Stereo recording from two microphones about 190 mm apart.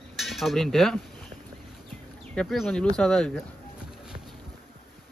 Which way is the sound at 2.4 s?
5° left (ahead or behind).